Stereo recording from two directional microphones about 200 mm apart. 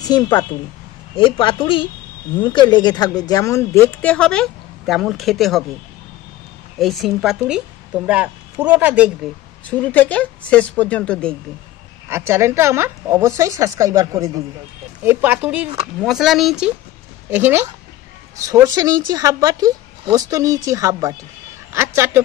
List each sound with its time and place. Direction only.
0.0 s a woman's voice: 20° left (ahead or behind); by 5.7 s centre (ahead or behind)
6.8 s a woman's voice: centre (ahead or behind)
9.7 s speech: 10° left (ahead or behind)
12.1 s a woman's voice: 10° right (ahead or behind)